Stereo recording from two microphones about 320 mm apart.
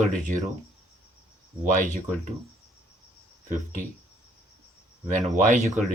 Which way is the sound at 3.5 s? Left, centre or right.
Right.